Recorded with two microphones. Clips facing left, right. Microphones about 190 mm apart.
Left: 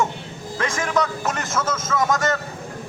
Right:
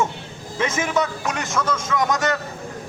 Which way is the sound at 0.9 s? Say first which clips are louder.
Even; centre (ahead or behind).